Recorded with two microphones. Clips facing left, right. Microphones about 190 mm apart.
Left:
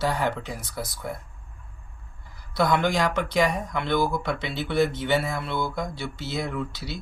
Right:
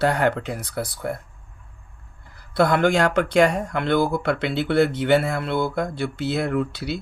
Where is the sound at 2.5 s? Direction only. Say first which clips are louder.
Right 4 dB; 60° right (ahead or behind).